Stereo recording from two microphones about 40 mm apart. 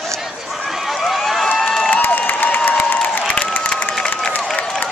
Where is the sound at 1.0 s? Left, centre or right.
Centre.